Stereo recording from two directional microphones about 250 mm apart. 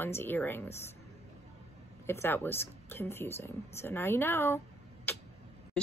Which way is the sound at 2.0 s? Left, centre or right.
Centre.